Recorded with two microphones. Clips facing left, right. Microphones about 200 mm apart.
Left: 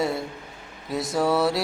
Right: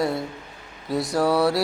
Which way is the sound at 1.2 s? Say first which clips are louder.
Right 1 dB; centre (ahead or behind).